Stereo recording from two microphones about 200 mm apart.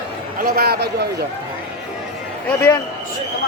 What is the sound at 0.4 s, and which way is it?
Speech, 50° right (ahead or behind).